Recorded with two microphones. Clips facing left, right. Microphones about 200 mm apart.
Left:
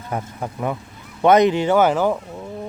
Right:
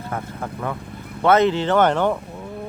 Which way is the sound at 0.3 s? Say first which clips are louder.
Left 2 dB; 15° left (ahead or behind).